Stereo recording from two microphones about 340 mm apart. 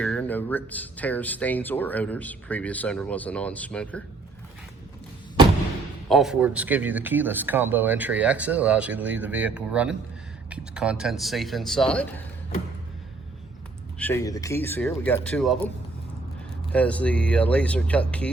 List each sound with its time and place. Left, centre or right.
0.0 s speech: centre
6.1 s speech: centre
14.0 s speech: centre
16.7 s speech: centre